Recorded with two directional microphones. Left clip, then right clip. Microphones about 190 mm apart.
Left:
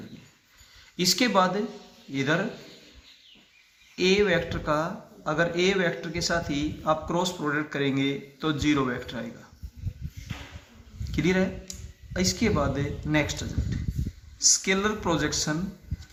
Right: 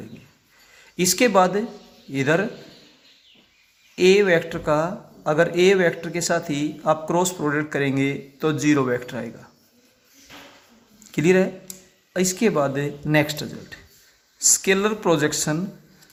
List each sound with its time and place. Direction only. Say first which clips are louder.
0.9 s speech: right 5 dB; 40° right (ahead or behind)
3.9 s speech: right 6 dB; 45° right (ahead or behind)
11.1 s speech: right 7 dB; 45° right (ahead or behind)